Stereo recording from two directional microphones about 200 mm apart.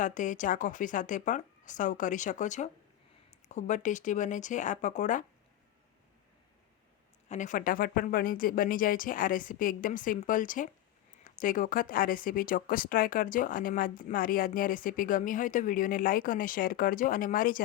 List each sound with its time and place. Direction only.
0.0 s speech: 40° left (ahead or behind)
7.3 s speech: 40° left (ahead or behind)